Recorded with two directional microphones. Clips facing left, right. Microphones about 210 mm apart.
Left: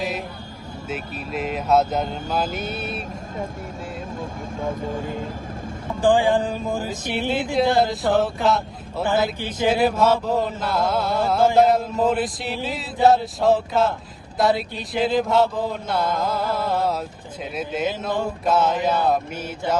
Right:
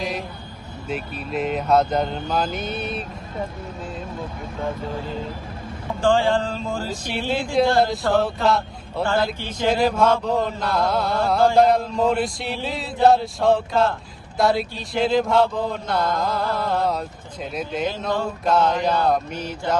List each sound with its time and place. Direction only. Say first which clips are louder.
0.9 s mantra: right 2 dB; 5° left (ahead or behind)
2.6 s speech: right 1 dB; 5° left (ahead or behind)
6.0 s speech: left 1 dB; 15° left (ahead or behind)
7.8 s mantra: even; centre (ahead or behind)
8.4 s speech: even; centre (ahead or behind)
9.6 s mantra: even; 5° left (ahead or behind)
19.5 s speech: even; 5° left (ahead or behind)